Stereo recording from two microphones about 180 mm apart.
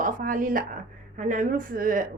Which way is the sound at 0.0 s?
50° right (ahead or behind).